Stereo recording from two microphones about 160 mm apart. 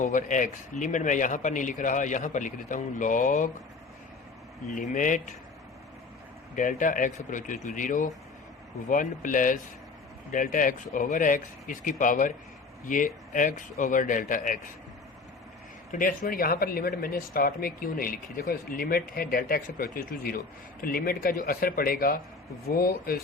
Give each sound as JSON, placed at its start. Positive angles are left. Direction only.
{"t": 0.0, "sound": "speech", "side_deg": 55}
{"t": 4.7, "sound": "speech", "side_deg": 55}
{"t": 6.6, "sound": "speech", "side_deg": 55}
{"t": 15.9, "sound": "speech", "side_deg": 60}